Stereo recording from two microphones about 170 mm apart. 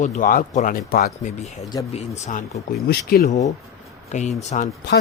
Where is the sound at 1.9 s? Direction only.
40° left (ahead or behind).